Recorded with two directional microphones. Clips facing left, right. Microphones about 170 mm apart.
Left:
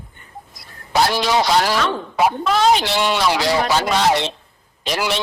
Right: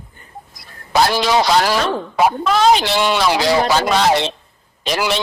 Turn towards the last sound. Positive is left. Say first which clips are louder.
# right 2 dB
turn(degrees=-90)